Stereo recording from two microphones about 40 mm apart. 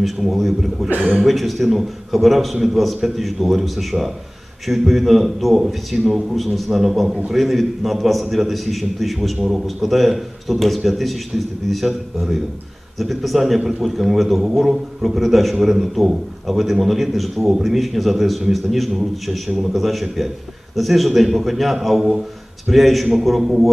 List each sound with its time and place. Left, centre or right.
0.0 s a man's voice: centre
0.8 s speech: right
1.2 s a man's voice: centre
9.4 s a man's voice: centre